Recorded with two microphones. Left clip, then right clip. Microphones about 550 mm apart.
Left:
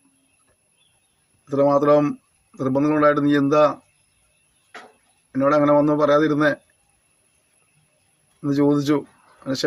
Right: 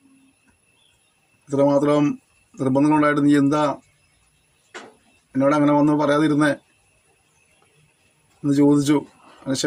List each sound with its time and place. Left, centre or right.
1.5 s a man's voice: left
5.3 s a man's voice: left
8.4 s a man's voice: left